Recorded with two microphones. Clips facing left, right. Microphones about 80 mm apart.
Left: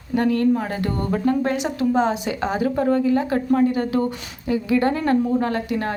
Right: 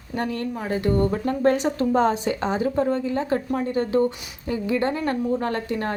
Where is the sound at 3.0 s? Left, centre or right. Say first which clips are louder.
Left 4 dB; right.